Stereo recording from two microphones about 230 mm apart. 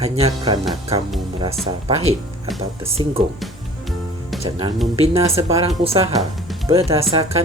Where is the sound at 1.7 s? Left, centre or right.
Right.